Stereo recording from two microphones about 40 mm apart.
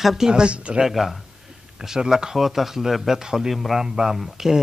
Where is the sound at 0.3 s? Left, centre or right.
Right.